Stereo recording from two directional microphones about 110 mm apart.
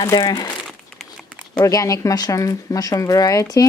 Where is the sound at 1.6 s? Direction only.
30° left (ahead or behind).